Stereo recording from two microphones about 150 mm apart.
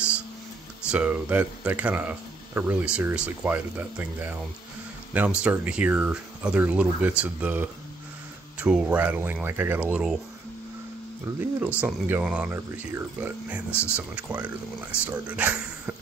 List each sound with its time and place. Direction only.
0.9 s speech: 10° right (ahead or behind)
11.3 s speech: 15° right (ahead or behind)
13.7 s speech: 15° left (ahead or behind)
13.9 s speech: 10° right (ahead or behind)